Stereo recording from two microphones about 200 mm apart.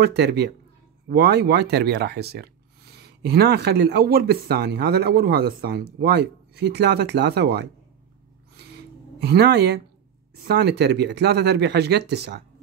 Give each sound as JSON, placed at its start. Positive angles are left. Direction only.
{"t": 0.0, "sound": "speech", "side_deg": -55}
{"t": 8.5, "sound": "a sound", "side_deg": -55}
{"t": 10.4, "sound": "speech", "side_deg": -55}